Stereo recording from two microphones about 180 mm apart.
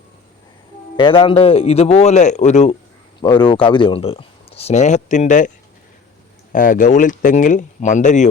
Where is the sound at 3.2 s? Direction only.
25° left (ahead or behind).